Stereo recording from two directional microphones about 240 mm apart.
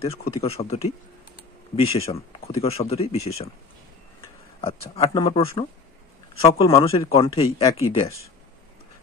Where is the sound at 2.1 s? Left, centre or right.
Left.